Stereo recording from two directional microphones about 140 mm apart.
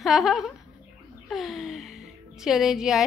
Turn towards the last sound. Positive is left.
turn(degrees=-5)  # may be behind; listen again after turning